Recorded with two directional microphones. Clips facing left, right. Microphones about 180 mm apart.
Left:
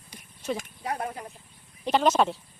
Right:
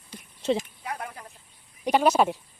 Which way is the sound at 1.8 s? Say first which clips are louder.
Right 1 dB; 10° right (ahead or behind).